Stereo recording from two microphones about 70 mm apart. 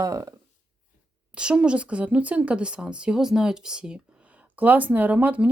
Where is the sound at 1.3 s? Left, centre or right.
Centre.